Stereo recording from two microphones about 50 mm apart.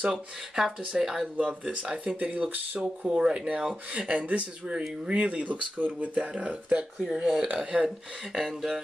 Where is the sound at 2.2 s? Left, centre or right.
Right.